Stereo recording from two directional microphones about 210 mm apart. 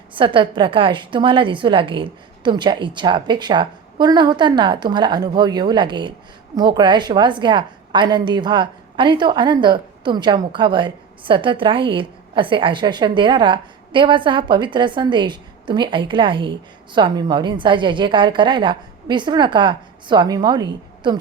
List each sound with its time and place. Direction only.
0.1 s a woman's voice: 25° right (ahead or behind)